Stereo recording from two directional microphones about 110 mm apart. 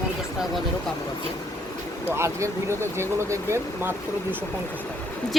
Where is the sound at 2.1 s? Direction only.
25° right (ahead or behind).